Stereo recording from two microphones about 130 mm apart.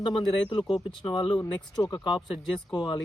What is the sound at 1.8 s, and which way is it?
Speech, 35° left (ahead or behind).